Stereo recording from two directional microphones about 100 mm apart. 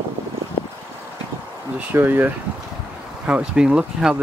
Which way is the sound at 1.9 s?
20° right (ahead or behind).